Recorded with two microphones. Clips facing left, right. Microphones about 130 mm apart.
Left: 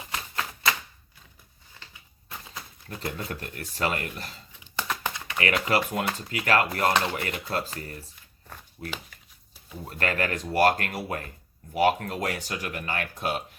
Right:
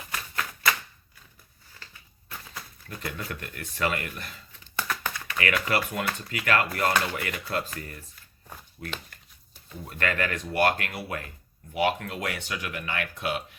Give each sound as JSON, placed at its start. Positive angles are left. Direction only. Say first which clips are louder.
{"t": 0.0, "sound": "a sound", "louder": "left 1 dB", "side_deg": 25}
{"t": 2.6, "sound": "speech", "louder": "left 3 dB", "side_deg": 30}
{"t": 4.6, "sound": "a sound", "louder": "left 1 dB", "side_deg": 20}
{"t": 5.4, "sound": "speech", "louder": "left 2 dB", "side_deg": 35}
{"t": 6.9, "sound": "speech", "louder": "left 1 dB", "side_deg": 25}
{"t": 7.5, "sound": "speech", "louder": "right 1 dB", "side_deg": 35}